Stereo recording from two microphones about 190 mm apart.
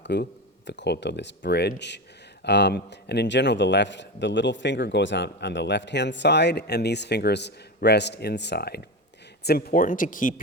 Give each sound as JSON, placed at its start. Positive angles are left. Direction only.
{"t": 0.0, "sound": "a man's voice", "side_deg": 65}